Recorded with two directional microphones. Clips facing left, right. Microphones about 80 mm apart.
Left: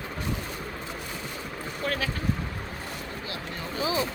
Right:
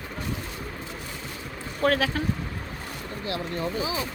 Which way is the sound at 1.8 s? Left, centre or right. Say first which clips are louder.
Right 8 dB; right.